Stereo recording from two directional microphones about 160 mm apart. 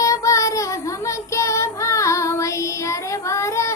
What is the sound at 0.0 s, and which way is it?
Child singing, 20° left (ahead or behind).